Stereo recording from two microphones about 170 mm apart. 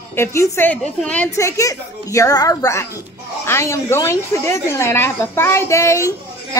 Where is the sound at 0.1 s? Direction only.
15° left (ahead or behind).